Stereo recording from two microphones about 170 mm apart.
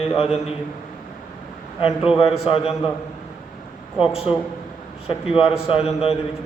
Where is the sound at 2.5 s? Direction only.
35° left (ahead or behind).